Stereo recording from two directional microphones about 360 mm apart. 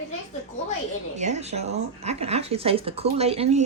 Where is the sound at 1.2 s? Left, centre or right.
Centre.